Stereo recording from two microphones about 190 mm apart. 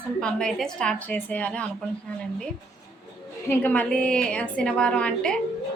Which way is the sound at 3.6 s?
10° left (ahead or behind).